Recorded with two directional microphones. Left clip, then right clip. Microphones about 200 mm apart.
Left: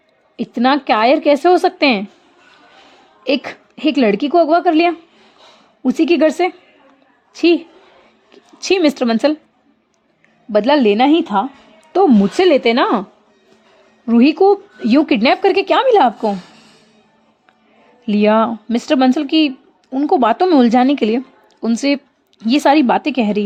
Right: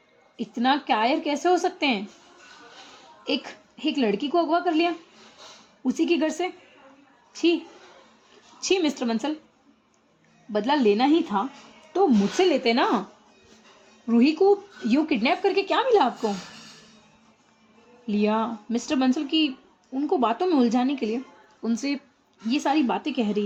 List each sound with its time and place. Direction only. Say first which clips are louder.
0.3 s a woman's voice: left 9 dB; 55° left (ahead or behind)
3.2 s a woman's voice: left 11 dB; 55° left (ahead or behind)
8.6 s speech: left 10 dB; 55° left (ahead or behind)
10.5 s a woman's voice: left 9 dB; 50° left (ahead or behind)
14.1 s a woman's voice: left 8 dB; 50° left (ahead or behind)
18.0 s a woman's voice: left 12 dB; 60° left (ahead or behind)
22.4 s speech: left 12 dB; 60° left (ahead or behind)